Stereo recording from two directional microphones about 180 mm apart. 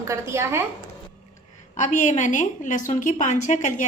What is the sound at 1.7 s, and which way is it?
A woman's voice, 45° left (ahead or behind).